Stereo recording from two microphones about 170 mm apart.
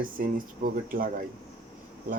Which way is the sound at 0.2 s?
55° right (ahead or behind).